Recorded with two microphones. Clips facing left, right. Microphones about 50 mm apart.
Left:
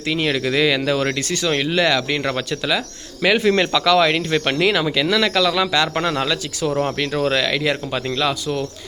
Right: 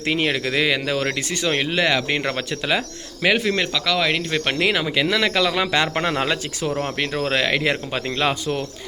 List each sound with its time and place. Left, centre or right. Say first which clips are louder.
0.1 s speech: left 1 dB; centre
3.2 s speech: left 3 dB; centre; by 8.6 s right